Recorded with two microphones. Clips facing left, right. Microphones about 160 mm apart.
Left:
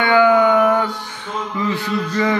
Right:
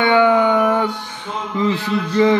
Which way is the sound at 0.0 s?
25° right (ahead or behind).